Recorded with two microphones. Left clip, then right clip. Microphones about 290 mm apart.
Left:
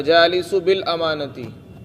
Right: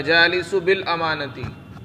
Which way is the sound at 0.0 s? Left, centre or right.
Left.